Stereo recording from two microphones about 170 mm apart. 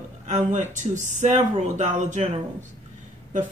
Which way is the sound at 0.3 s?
45° right (ahead or behind).